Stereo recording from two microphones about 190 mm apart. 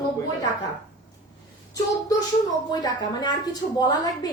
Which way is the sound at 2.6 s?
20° left (ahead or behind).